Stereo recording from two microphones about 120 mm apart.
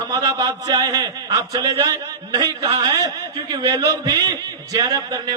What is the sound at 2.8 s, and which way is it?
Speech, 35° right (ahead or behind).